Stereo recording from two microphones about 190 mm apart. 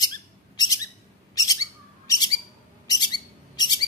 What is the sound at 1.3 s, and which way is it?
Bird, 20° left (ahead or behind).